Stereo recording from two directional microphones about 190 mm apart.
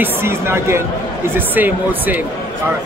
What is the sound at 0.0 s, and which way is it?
Speech, 10° right (ahead or behind).